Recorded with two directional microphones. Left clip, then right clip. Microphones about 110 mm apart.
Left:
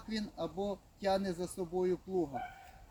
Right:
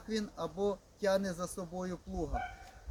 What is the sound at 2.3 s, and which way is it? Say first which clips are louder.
Speech: right 2 dB; 30° right (ahead or behind).